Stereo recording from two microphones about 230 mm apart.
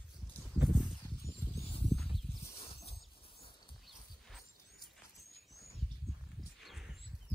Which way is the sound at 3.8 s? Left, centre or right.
Centre.